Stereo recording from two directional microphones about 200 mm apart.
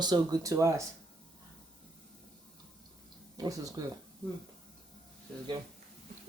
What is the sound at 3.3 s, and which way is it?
Speech, 15° right (ahead or behind).